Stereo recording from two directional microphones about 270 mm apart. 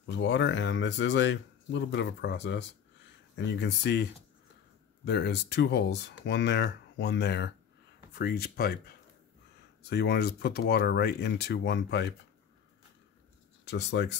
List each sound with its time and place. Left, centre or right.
0.0 s speech: left
13.7 s speech: left